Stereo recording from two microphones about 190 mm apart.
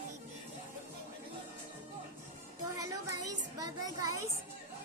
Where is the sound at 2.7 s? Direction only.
15° right (ahead or behind).